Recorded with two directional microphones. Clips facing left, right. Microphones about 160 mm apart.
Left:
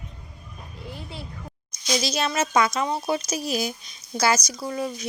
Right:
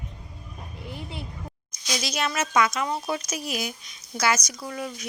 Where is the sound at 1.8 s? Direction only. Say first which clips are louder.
Left 4 dB; 30° left (ahead or behind).